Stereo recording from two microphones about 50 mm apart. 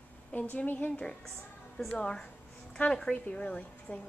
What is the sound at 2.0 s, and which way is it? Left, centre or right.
A woman's voice, centre.